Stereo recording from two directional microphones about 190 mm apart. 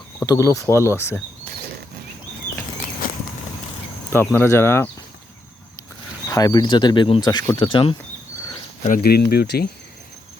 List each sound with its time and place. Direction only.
0.2 s speech: 15° left (ahead or behind)
4.1 s speech: 10° left (ahead or behind)
6.2 s speech: 20° left (ahead or behind)
9.0 s speech: 55° left (ahead or behind)